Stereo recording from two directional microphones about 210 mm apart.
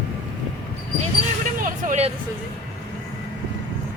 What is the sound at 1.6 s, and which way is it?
Vehicle, 35° right (ahead or behind).